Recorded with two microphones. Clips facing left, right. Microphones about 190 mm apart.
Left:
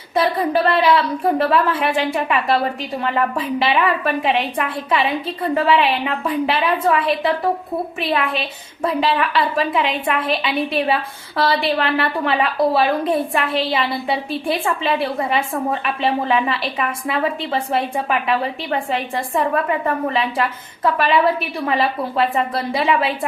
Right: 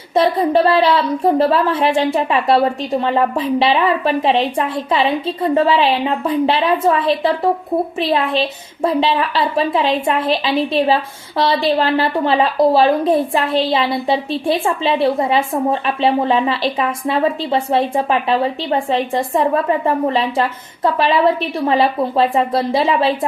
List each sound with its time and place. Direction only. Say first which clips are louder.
0.1 s a woman's voice: right 4 dB; 25° right (ahead or behind)